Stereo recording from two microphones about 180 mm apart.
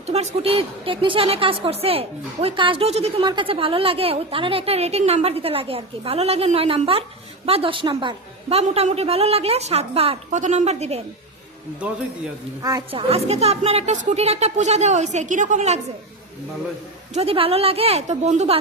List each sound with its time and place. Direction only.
0.0 s a woman's voice: 35° right (ahead or behind)
12.9 s a woman's voice: 35° right (ahead or behind)
17.2 s a woman's voice: 30° right (ahead or behind)